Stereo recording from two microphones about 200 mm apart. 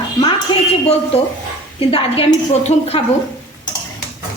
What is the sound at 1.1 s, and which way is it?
A woman's voice, 30° left (ahead or behind).